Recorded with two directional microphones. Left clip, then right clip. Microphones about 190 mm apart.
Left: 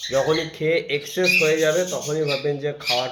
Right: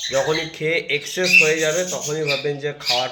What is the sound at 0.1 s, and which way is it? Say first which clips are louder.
Speech: left 1 dB; 15° left (ahead or behind).